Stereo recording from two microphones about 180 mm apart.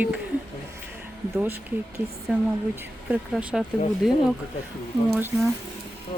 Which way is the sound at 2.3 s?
5° right (ahead or behind).